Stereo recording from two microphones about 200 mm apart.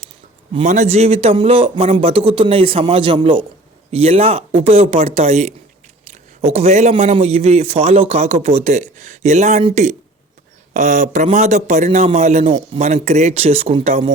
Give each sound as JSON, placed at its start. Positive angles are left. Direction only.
{"t": 0.5, "sound": "a man's voice", "side_deg": -35}